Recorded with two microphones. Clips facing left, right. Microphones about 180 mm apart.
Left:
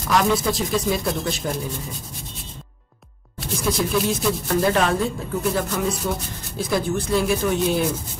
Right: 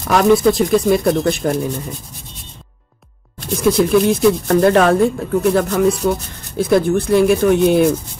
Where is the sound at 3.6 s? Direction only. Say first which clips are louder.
Right 9 dB; 60° right (ahead or behind).